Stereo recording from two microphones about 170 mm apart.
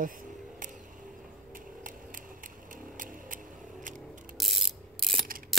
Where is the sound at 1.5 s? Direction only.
50° right (ahead or behind).